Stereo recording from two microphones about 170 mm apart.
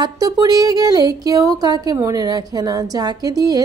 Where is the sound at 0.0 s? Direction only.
20° right (ahead or behind).